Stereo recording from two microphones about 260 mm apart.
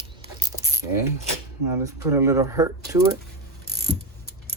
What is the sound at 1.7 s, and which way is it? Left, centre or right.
Speech, centre.